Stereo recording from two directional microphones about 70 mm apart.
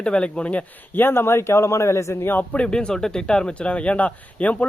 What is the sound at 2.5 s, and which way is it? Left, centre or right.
Speech, centre.